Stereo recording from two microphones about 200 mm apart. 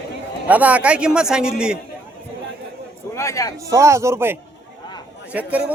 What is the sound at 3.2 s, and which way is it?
Speech, 15° left (ahead or behind).